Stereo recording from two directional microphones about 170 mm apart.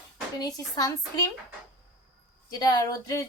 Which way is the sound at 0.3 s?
20° left (ahead or behind).